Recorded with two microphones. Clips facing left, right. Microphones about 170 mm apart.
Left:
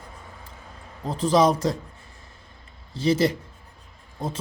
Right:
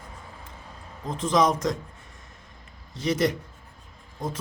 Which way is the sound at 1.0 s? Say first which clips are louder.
Left 3 dB; 35° left (ahead or behind).